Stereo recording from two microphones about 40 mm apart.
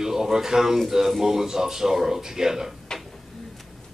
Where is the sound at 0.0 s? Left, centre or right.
Centre.